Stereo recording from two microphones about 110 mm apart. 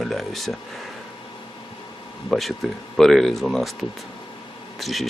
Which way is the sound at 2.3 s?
Centre (ahead or behind).